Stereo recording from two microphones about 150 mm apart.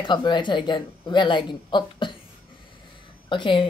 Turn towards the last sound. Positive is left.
turn(degrees=35)  # may be behind; listen again after turning